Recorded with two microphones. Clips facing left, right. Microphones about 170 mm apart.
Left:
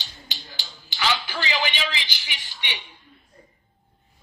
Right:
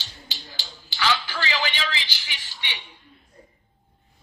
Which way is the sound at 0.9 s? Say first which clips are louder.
Right 1 dB; 15° left (ahead or behind).